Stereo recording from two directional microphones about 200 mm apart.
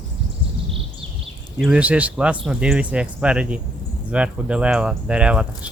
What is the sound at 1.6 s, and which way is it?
Speech, 5° right (ahead or behind).